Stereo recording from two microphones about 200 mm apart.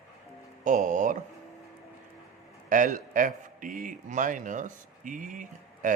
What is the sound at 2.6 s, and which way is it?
A man's voice, 40° right (ahead or behind).